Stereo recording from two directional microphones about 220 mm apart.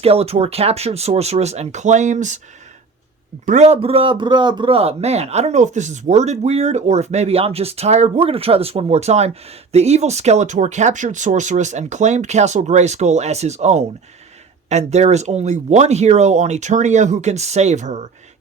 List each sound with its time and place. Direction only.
0.0 s speech: 25° right (ahead or behind)
3.4 s a man's voice: 30° right (ahead or behind)